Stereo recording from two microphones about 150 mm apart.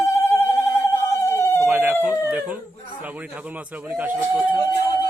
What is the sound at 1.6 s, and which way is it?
Emergency vehicle, 15° right (ahead or behind).